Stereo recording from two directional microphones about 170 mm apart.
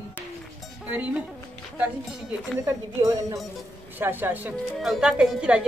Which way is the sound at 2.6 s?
15° right (ahead or behind).